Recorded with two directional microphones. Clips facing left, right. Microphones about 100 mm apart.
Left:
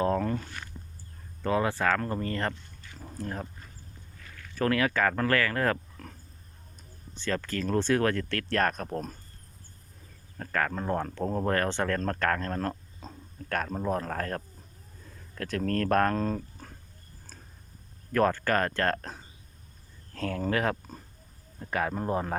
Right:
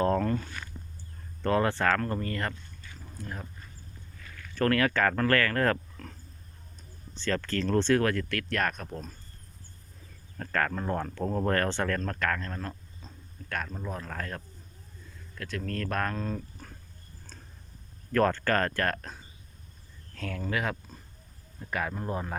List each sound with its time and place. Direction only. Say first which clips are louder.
0.0 s a sound: right 1 dB; 10° left (ahead or behind)
1.4 s speech: right 1 dB; 5° left (ahead or behind)
2.0 s speech: left 1 dB; 20° left (ahead or behind)
3.2 s speech: left 5 dB; 40° left (ahead or behind)
4.5 s speech: right 1 dB; 15° left (ahead or behind)
7.2 s speech: right 1 dB; 15° left (ahead or behind)
8.0 s speech: left 1 dB; 30° left (ahead or behind); by 9.1 s 50° left (ahead or behind)
10.3 s speech: even; 10° left (ahead or behind)
12.0 s speech: left 3 dB; 40° left (ahead or behind)
18.1 s speech: even; 15° left (ahead or behind); by 22.4 s 35° left (ahead or behind)